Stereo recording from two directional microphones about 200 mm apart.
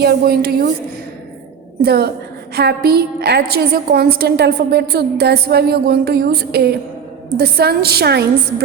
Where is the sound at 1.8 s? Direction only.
50° right (ahead or behind).